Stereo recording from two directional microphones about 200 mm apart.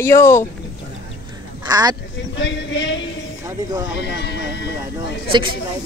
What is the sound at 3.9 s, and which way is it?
Sheep, 55° left (ahead or behind).